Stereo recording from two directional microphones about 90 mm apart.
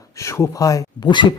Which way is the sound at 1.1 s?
60° left (ahead or behind).